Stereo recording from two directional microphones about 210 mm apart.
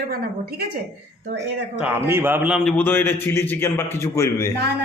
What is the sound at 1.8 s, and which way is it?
A man's voice, 10° right (ahead or behind).